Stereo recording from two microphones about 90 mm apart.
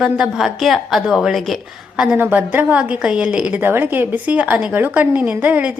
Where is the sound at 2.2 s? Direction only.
20° right (ahead or behind).